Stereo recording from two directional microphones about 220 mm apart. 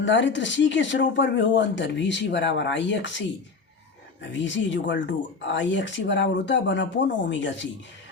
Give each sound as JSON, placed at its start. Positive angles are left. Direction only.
{"t": 0.0, "sound": "speech", "side_deg": 55}
{"t": 4.2, "sound": "speech", "side_deg": 55}